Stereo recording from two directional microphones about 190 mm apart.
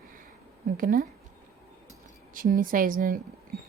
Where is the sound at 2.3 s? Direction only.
45° right (ahead or behind).